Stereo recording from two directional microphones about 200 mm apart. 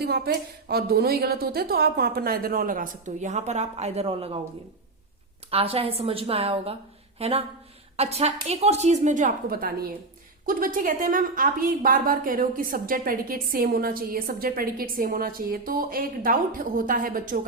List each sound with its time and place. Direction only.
0.0 s a woman's voice: 50° right (ahead or behind); by 4.4 s 25° right (ahead or behind)
5.5 s a woman's voice: 30° right (ahead or behind)